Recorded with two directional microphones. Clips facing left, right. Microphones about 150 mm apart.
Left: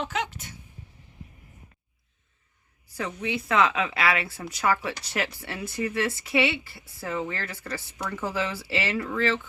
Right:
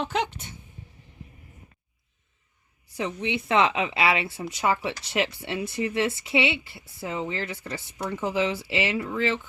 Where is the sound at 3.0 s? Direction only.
25° right (ahead or behind).